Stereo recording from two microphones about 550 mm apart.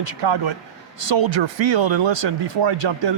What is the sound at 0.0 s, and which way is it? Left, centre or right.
Speech, right.